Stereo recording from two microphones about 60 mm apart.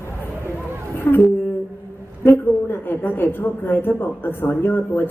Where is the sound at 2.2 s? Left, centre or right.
Left.